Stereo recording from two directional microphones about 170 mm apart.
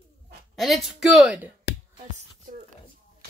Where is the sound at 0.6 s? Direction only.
Centre (ahead or behind).